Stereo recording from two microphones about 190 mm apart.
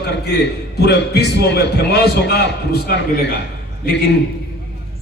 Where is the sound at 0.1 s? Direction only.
60° left (ahead or behind).